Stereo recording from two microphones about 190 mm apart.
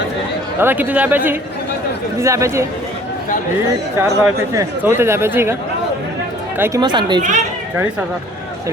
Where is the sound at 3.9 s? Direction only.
15° right (ahead or behind).